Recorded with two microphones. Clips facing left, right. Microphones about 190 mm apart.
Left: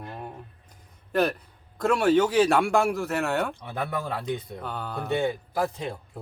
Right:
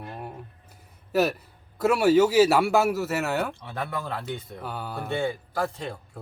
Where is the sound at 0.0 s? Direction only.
5° right (ahead or behind).